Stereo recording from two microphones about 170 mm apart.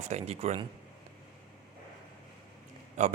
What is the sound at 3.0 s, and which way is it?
Speech, 45° right (ahead or behind).